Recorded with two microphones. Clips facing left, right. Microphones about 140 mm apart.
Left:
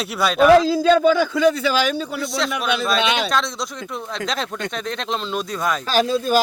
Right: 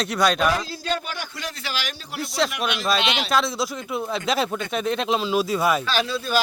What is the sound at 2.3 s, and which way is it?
Speech, centre (ahead or behind).